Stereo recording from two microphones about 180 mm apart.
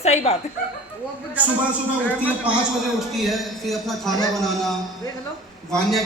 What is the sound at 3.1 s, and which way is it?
A man's voice, centre (ahead or behind).